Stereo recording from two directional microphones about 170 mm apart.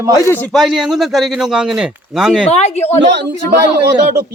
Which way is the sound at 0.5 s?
Centre (ahead or behind).